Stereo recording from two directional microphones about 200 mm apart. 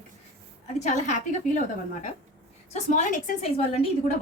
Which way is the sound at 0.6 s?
35° left (ahead or behind).